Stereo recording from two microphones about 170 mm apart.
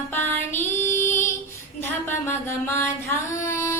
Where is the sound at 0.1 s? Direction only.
10° left (ahead or behind).